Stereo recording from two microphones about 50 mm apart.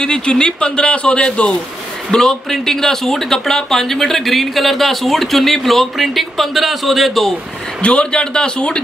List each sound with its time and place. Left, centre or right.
0.0 s a man's voice: centre
2.0 s speech: centre
7.8 s a man's voice: left